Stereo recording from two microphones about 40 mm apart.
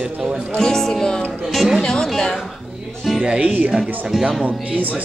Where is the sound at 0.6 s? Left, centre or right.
Centre.